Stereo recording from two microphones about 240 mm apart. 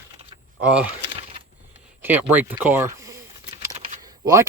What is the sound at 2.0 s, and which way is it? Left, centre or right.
Speech, centre.